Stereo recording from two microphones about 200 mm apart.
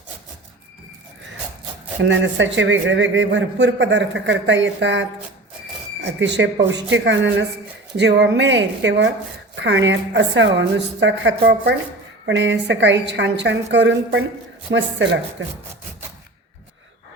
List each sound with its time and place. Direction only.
2.0 s a man's voice: 65° right (ahead or behind)
6.1 s a man's voice: 65° right (ahead or behind)